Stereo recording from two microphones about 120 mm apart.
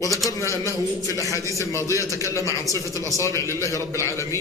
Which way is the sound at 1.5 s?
25° left (ahead or behind).